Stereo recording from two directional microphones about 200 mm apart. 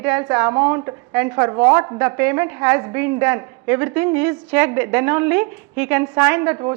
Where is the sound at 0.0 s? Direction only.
10° right (ahead or behind).